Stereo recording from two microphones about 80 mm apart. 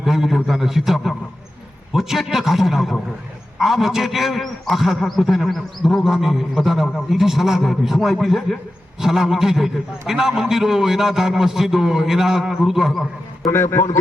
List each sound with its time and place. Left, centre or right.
0.0 s a man's voice: centre
13.5 s a man's voice: left